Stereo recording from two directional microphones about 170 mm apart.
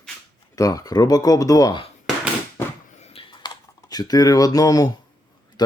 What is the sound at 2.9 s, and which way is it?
Typing, 40° left (ahead or behind).